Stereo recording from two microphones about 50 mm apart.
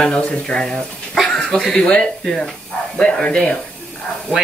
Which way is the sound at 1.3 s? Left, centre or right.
Centre.